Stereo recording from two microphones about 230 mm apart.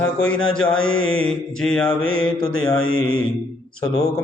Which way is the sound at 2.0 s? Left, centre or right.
Left.